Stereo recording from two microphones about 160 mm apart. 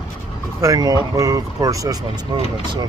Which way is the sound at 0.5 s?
20° right (ahead or behind).